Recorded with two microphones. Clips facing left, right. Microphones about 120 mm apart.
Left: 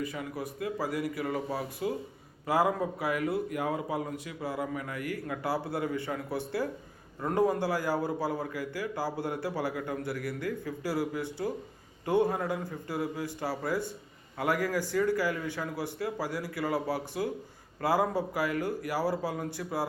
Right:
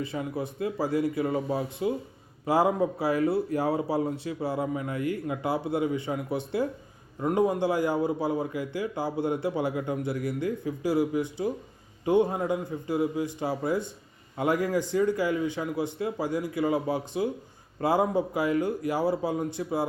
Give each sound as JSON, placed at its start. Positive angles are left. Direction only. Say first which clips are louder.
{"t": 0.0, "sound": "a man's voice", "louder": "right 4 dB", "side_deg": -25}